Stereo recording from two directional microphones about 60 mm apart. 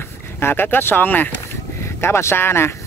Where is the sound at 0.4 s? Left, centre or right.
Left.